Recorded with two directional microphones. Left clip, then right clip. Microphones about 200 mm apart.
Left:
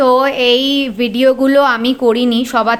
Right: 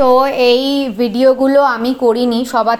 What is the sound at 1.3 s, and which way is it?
Speech, 10° left (ahead or behind).